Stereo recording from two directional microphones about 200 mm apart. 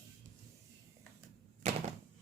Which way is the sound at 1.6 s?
35° right (ahead or behind).